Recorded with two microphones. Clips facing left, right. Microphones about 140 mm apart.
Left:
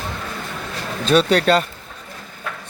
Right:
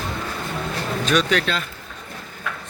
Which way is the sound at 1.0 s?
35° left (ahead or behind).